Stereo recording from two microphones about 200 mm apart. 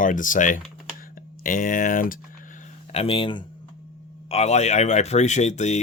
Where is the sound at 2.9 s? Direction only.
30° left (ahead or behind).